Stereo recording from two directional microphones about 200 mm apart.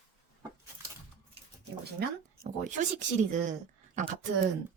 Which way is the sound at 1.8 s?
50° right (ahead or behind).